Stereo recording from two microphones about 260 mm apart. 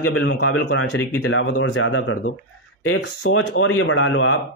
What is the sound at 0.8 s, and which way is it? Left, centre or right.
A man's voice, left.